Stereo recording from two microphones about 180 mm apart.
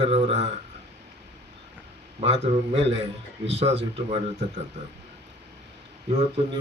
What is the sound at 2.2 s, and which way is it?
Speech, 35° right (ahead or behind).